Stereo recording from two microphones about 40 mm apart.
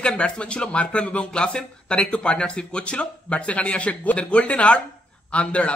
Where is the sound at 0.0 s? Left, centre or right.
Left.